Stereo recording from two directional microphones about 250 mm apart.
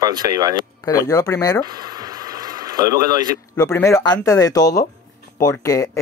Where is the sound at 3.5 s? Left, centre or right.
Centre.